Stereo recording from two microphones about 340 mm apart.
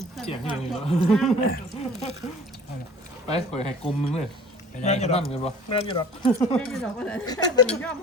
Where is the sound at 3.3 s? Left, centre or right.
Centre.